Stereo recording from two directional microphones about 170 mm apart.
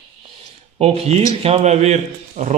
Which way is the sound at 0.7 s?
35° right (ahead or behind).